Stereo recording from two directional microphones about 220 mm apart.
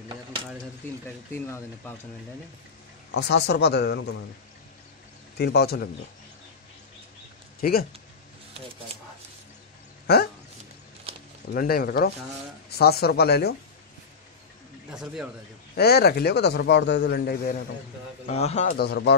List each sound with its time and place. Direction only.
1.3 s speech: 10° left (ahead or behind)
3.1 s a man's voice: 50° left (ahead or behind)
5.4 s a man's voice: 45° left (ahead or behind)
7.6 s speech: 40° left (ahead or behind)
10.0 s dog: 45° left (ahead or behind)
11.5 s a man's voice: 40° left (ahead or behind)
14.9 s speech: 5° right (ahead or behind)
15.7 s a man's voice: 45° left (ahead or behind)
18.2 s speech: 30° left (ahead or behind)
18.8 s a man's voice: 50° left (ahead or behind)